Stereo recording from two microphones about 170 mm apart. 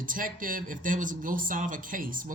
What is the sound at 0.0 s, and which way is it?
Speech, 55° right (ahead or behind).